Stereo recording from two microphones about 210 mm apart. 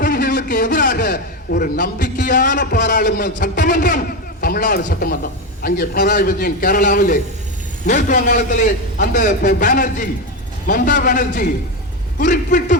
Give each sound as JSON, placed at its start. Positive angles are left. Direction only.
{"t": 0.0, "sound": "a man's voice", "side_deg": 40}